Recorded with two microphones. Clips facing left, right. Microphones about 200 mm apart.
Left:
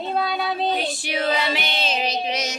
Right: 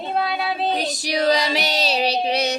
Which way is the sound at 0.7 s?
40° right (ahead or behind).